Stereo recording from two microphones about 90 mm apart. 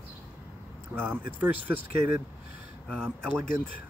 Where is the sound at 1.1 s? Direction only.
20° right (ahead or behind).